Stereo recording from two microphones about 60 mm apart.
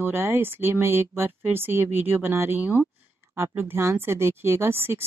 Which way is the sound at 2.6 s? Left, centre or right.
Right.